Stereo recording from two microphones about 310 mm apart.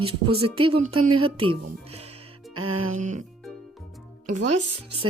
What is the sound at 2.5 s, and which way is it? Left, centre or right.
Music, right.